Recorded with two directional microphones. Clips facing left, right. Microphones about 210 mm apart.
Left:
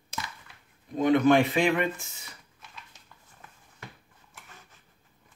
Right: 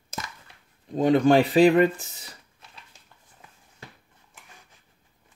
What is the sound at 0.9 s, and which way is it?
Speech, 35° right (ahead or behind).